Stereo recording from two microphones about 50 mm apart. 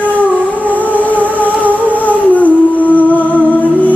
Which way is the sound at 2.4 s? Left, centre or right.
Left.